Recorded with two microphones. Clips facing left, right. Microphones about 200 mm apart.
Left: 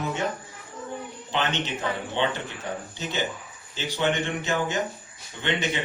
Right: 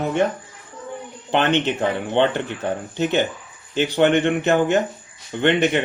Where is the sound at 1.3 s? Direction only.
60° right (ahead or behind).